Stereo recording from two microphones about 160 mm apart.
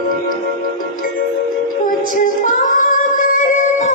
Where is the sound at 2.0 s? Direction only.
55° left (ahead or behind).